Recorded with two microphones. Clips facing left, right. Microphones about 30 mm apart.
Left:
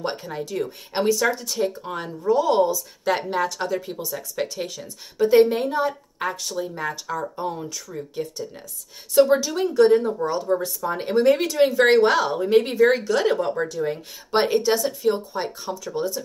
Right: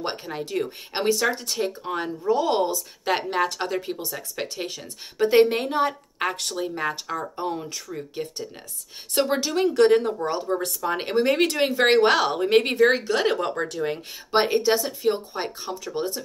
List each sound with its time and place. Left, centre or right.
0.0 s speech: right
6.7 s speech: right
9.8 s speech: right
10.3 s speech: centre
10.6 s speech: right
11.3 s speech: right
11.7 s speech: centre
12.1 s speech: right
12.4 s speech: right
12.9 s speech: right
14.3 s speech: centre; by 16.2 s right